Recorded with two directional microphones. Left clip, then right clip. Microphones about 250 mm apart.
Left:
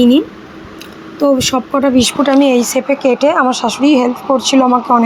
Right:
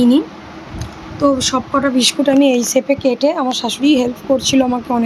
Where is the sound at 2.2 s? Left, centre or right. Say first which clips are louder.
Left 2 dB; centre.